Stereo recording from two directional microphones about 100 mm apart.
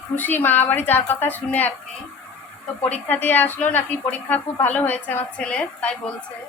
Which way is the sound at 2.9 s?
20° left (ahead or behind).